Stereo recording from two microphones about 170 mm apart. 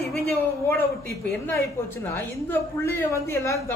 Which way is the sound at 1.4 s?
15° left (ahead or behind).